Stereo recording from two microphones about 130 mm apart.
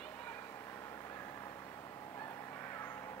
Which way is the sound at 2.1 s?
20° left (ahead or behind).